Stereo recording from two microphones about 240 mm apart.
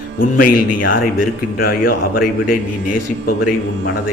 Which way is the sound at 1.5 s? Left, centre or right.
Left.